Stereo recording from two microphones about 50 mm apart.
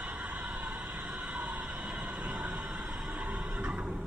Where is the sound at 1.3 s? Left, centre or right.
Right.